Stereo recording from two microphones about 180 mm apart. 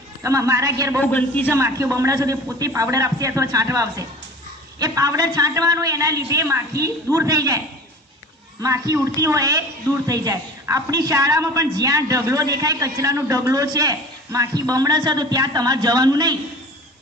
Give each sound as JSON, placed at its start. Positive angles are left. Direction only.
{"t": 0.2, "sound": "a man's voice", "side_deg": -15}
{"t": 1.0, "sound": "a man's voice", "side_deg": 10}
{"t": 1.5, "sound": "a man's voice", "side_deg": -15}
{"t": 8.6, "sound": "a man's voice", "side_deg": -20}